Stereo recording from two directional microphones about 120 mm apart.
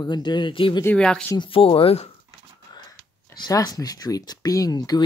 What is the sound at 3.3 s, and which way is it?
Speech, 30° left (ahead or behind).